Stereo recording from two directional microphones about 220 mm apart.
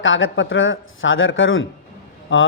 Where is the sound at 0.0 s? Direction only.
60° left (ahead or behind).